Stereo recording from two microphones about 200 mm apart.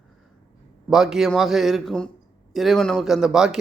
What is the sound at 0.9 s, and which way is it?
Speech, centre (ahead or behind).